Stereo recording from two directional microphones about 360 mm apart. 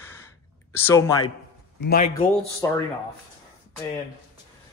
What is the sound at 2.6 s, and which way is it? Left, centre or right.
Speech, centre.